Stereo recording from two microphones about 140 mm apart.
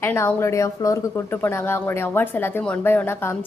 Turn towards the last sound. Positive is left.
turn(degrees=15)  # may be behind; listen again after turning